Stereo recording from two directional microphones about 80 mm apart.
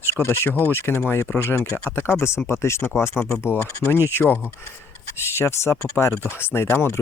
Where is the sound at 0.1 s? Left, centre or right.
Left.